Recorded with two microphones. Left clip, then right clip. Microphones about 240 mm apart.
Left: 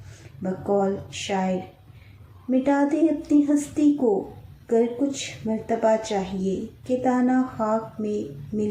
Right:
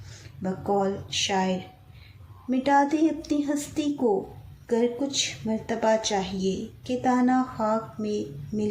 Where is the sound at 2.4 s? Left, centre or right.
Right.